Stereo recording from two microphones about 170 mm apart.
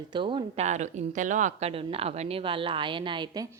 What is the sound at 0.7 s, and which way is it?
A woman's voice, 45° right (ahead or behind).